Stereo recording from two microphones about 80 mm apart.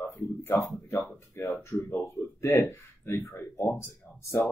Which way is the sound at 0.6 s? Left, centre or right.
Left.